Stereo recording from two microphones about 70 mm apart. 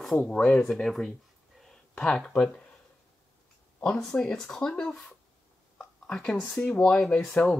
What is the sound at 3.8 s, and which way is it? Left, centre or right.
Speech, centre.